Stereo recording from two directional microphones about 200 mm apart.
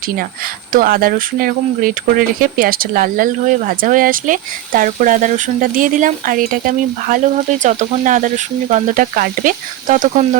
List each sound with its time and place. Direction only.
0.7 s speech: 45° right (ahead or behind)